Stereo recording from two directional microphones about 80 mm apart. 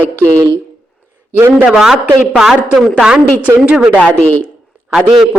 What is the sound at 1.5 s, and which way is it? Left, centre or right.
A man's voice, centre.